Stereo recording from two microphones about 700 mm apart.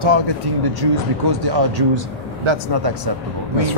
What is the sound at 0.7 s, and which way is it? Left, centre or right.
Speech, right.